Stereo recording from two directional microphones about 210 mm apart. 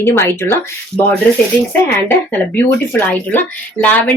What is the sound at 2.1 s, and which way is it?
Speech, 10° left (ahead or behind).